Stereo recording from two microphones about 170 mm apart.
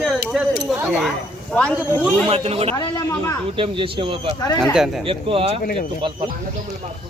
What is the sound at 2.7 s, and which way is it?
Speech, 20° left (ahead or behind).